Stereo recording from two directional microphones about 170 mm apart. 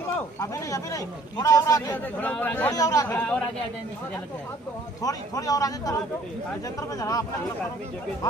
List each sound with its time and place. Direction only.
0.1 s speech: 20° left (ahead or behind)
2.7 s a man's voice: 20° left (ahead or behind)
3.1 s speech: 10° left (ahead or behind)
5.0 s a man's voice: 20° left (ahead or behind)
7.0 s a man's voice: 20° left (ahead or behind)